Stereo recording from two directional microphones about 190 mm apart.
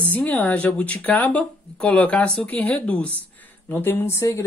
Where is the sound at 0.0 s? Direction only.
10° left (ahead or behind).